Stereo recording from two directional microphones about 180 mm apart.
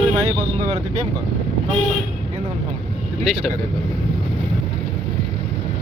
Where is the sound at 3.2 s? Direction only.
Centre (ahead or behind).